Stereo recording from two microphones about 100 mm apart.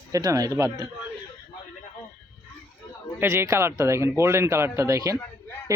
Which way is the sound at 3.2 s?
25° right (ahead or behind).